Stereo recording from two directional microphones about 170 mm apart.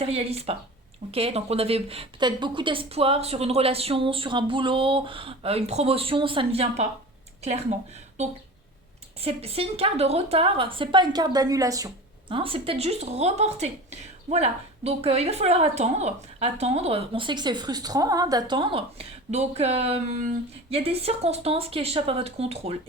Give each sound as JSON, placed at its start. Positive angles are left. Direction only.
{"t": 0.0, "sound": "a woman's voice", "side_deg": -35}
{"t": 9.2, "sound": "a woman's voice", "side_deg": -35}
{"t": 12.3, "sound": "a woman's voice", "side_deg": -30}